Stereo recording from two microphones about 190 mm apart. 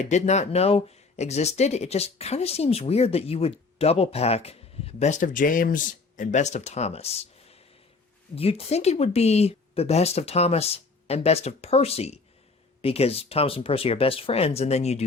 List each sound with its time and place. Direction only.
0.0 s speech: 35° left (ahead or behind)